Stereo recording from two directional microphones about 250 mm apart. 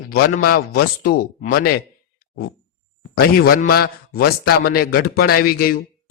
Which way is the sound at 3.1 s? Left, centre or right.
Left.